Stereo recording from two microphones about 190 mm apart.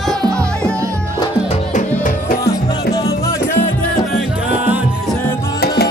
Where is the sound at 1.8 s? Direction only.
45° left (ahead or behind).